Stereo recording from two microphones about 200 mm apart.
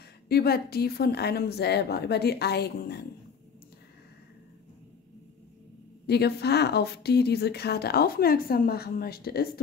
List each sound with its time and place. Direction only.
0.3 s speech: 50° left (ahead or behind)
6.0 s speech: 55° left (ahead or behind)